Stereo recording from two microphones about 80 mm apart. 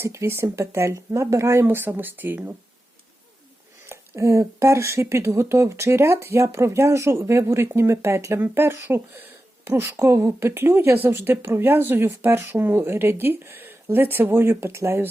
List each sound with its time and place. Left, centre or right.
0.0 s speech: right
3.8 s speech: right